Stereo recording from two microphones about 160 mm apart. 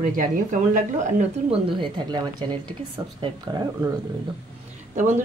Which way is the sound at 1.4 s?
35° right (ahead or behind).